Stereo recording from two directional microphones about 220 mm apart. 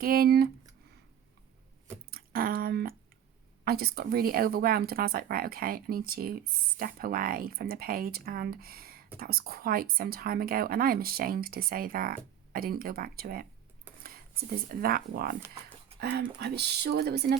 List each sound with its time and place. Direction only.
0.0 s a woman's voice: 40° right (ahead or behind)
2.0 s a sound: 45° right (ahead or behind)
3.6 s a woman's voice: 45° right (ahead or behind)